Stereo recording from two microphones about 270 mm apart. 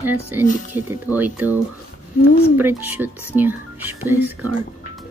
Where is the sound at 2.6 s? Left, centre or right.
Centre.